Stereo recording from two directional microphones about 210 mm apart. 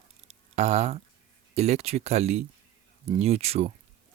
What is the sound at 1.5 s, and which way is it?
Speech, 30° right (ahead or behind).